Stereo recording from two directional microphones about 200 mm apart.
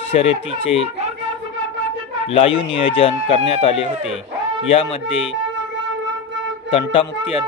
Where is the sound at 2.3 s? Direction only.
25° left (ahead or behind).